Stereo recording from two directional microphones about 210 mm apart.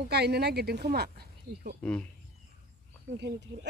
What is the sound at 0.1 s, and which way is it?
Speech, 50° right (ahead or behind).